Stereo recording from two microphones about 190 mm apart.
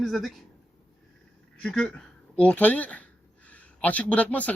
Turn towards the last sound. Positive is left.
turn(degrees=5)  # may be behind; listen again after turning